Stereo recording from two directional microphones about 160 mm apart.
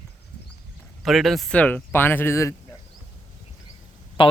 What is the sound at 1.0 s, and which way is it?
Speech, centre (ahead or behind).